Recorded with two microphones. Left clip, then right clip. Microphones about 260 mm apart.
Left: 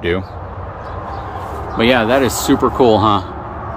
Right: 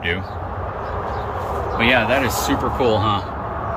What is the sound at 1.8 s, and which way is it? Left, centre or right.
Speech, left.